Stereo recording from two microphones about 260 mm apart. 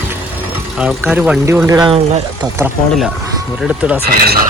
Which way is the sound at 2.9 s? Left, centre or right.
Centre.